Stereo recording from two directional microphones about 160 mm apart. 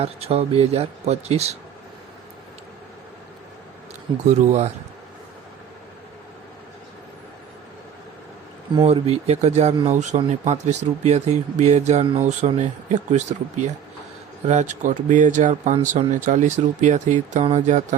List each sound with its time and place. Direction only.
0.0 s speech: 40° right (ahead or behind)
4.3 s speech: 45° right (ahead or behind)
8.8 s speech: 40° right (ahead or behind)